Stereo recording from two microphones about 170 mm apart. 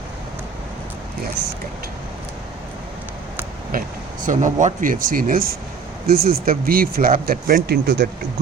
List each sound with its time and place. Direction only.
4.3 s speech: 45° right (ahead or behind); by 8.0 s 75° right (ahead or behind)